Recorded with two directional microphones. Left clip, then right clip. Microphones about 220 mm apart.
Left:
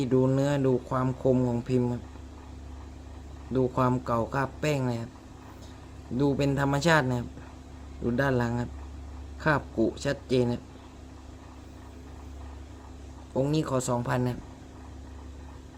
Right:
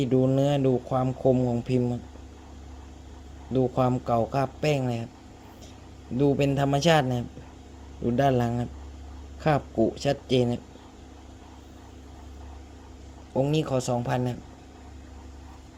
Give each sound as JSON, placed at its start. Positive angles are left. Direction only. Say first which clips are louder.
{"t": 0.0, "sound": "speech", "louder": "right 2 dB", "side_deg": -5}
{"t": 3.5, "sound": "speech", "louder": "right 2 dB", "side_deg": -5}
{"t": 6.1, "sound": "speech", "louder": "right 3 dB", "side_deg": -5}
{"t": 13.3, "sound": "speech", "louder": "right 2 dB", "side_deg": -5}